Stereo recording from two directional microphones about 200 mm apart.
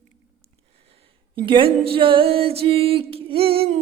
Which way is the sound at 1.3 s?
25° right (ahead or behind).